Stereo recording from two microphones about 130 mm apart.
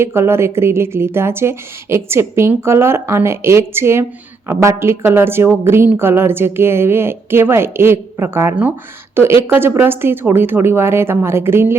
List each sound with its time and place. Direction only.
0.0 s a woman's voice: 20° right (ahead or behind)